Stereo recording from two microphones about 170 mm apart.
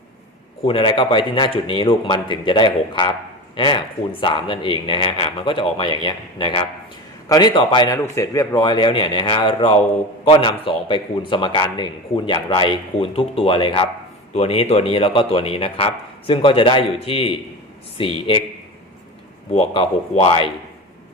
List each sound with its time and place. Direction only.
0.6 s a man's voice: 30° left (ahead or behind)
19.5 s a man's voice: 35° left (ahead or behind)